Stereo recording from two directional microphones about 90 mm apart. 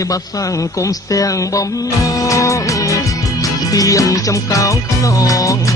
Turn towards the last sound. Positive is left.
turn(degrees=40)  # may be behind; listen again after turning